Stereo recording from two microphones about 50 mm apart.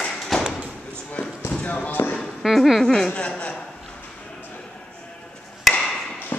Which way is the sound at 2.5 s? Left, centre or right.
Centre.